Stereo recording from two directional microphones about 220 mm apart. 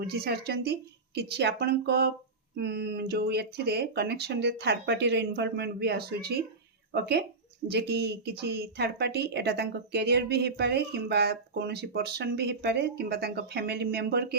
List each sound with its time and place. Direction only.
0.0 s a woman's voice: 45° right (ahead or behind)